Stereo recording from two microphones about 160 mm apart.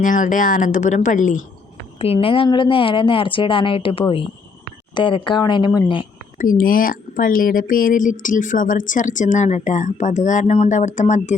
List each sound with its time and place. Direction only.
0.0 s speech: 55° left (ahead or behind)
2.0 s speech: 35° left (ahead or behind)
6.4 s speech: 60° left (ahead or behind)